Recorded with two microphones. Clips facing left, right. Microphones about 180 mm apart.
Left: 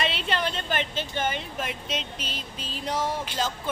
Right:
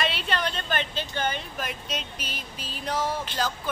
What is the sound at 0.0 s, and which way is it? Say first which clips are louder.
A woman's voice: even; 25° left (ahead or behind).